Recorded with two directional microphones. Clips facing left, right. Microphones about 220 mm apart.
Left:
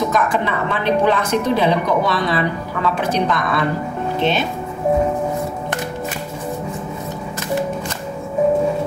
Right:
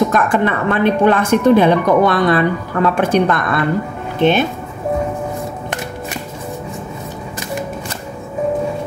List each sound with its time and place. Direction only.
0.1 s speech: 55° right (ahead or behind)